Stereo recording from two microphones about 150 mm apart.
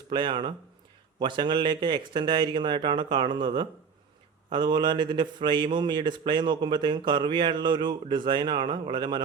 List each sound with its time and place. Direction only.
0.1 s a man's voice: 30° right (ahead or behind)